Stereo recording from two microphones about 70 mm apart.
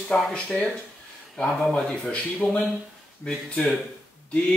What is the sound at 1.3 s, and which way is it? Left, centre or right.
Speech, centre.